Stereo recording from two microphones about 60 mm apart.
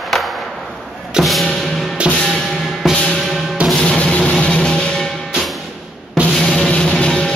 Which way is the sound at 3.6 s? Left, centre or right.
Right.